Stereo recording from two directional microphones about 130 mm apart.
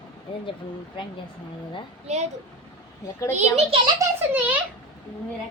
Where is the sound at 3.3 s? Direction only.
55° right (ahead or behind).